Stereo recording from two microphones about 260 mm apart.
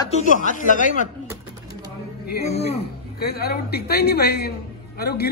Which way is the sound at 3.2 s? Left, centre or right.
Left.